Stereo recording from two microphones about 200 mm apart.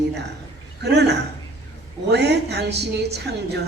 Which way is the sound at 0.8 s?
55° right (ahead or behind).